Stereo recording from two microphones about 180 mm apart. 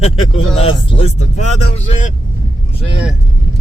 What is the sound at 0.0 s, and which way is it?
Speech, 35° left (ahead or behind).